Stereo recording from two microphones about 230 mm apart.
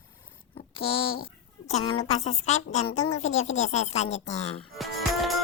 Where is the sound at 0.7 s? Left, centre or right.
Left.